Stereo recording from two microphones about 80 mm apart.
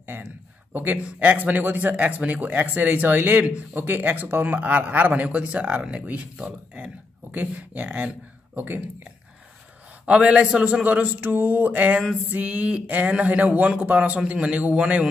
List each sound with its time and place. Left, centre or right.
0.0 s a sound: right
0.7 s speech: right
10.0 s speech: centre